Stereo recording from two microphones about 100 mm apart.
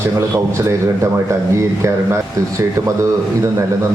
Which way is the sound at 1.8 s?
30° right (ahead or behind).